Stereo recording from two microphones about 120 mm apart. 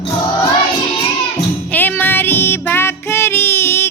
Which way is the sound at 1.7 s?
15° left (ahead or behind).